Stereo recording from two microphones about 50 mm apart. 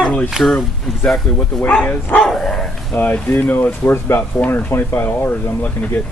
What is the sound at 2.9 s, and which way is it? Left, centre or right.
Speech, left.